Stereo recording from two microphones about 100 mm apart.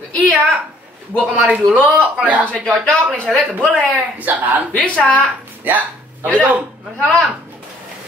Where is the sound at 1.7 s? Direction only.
10° left (ahead or behind).